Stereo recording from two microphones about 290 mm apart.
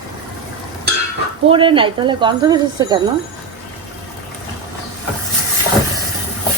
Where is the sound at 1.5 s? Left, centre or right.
Centre.